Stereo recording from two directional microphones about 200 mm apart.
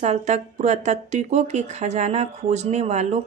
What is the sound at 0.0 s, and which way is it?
Speech, 35° right (ahead or behind).